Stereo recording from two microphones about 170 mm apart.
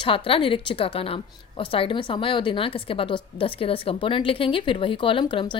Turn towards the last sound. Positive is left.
turn(degrees=30)  # may be behind; listen again after turning